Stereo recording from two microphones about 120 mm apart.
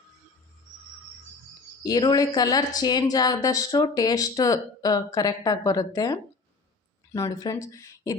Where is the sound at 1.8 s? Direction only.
30° left (ahead or behind).